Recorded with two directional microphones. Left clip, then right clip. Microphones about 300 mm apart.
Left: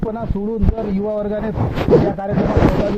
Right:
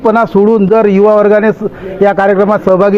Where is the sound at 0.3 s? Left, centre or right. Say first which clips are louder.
Right 17 dB; right.